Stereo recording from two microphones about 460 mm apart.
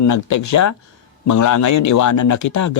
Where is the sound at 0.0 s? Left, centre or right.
Left.